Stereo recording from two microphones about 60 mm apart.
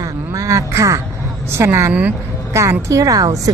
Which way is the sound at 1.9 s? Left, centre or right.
Right.